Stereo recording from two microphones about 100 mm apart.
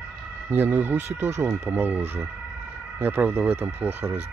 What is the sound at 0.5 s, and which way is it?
Speech, 20° right (ahead or behind).